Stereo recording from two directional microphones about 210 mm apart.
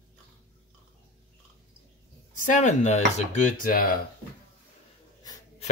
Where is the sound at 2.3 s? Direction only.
35° left (ahead or behind).